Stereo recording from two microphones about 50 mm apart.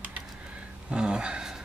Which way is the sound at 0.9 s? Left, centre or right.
Centre.